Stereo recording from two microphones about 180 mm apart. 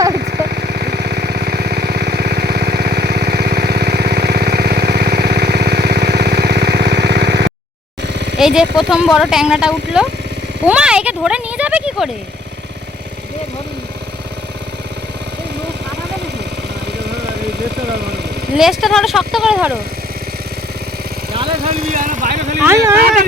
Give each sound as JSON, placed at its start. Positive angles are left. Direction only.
{"t": 0.2, "sound": "vehicle", "side_deg": -60}
{"t": 8.4, "sound": "speech", "side_deg": 0}
{"t": 18.5, "sound": "speech", "side_deg": 0}
{"t": 21.8, "sound": "speech", "side_deg": -50}
{"t": 22.6, "sound": "speech", "side_deg": -15}